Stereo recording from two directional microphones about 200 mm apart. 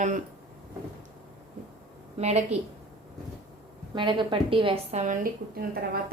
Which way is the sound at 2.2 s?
35° right (ahead or behind).